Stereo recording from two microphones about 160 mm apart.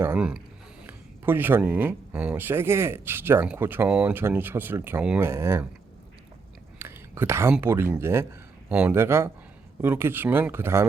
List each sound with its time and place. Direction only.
0.0 s speech: 10° right (ahead or behind)
6.7 s whispering: 15° right (ahead or behind)
7.5 s speech: 15° right (ahead or behind)